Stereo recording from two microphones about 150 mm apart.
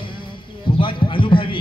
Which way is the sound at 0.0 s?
35° left (ahead or behind).